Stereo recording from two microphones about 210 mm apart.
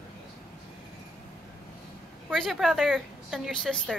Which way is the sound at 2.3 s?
Centre (ahead or behind).